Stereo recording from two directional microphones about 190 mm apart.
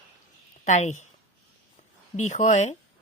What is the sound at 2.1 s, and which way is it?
Speech, 40° left (ahead or behind).